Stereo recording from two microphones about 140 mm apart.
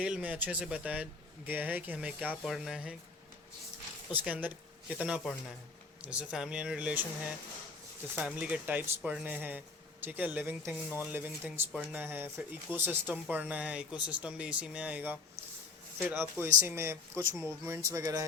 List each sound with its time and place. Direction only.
0.0 s speech: 10° right (ahead or behind)
4.1 s speech: 10° right (ahead or behind)